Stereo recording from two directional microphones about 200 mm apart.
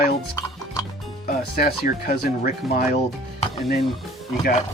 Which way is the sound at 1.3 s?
50° left (ahead or behind).